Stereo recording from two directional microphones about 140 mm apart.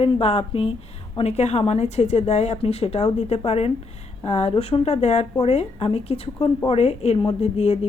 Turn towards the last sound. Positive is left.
turn(degrees=50)  # may be behind; listen again after turning